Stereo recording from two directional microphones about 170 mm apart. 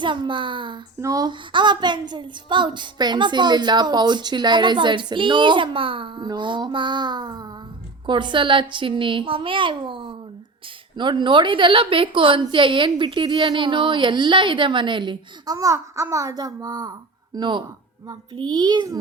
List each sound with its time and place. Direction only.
0.0 s a woman's voice: 30° right (ahead or behind)